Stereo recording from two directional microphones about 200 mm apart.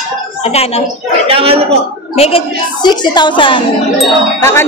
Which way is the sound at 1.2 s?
30° right (ahead or behind).